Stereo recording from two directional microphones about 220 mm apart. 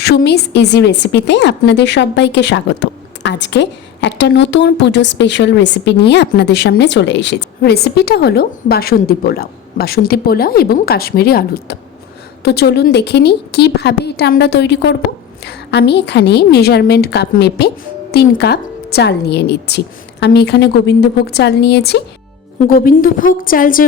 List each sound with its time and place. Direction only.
0.0 s a woman's voice: 45° left (ahead or behind)